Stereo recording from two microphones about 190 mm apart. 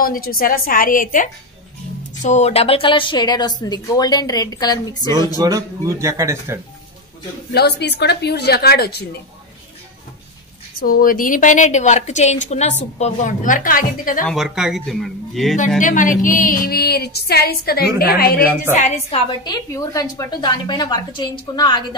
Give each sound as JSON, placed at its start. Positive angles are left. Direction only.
{"t": 0.0, "sound": "a woman's voice", "side_deg": 50}
{"t": 5.4, "sound": "a man's voice", "side_deg": -15}
{"t": 7.5, "sound": "a woman's voice", "side_deg": 60}
{"t": 10.8, "sound": "a woman's voice", "side_deg": 50}
{"t": 14.2, "sound": "speech", "side_deg": 0}
{"t": 15.8, "sound": "speech", "side_deg": 45}
{"t": 18.8, "sound": "a woman's voice", "side_deg": 35}